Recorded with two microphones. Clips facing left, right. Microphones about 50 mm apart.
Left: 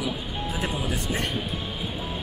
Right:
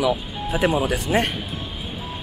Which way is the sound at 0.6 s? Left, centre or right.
Right.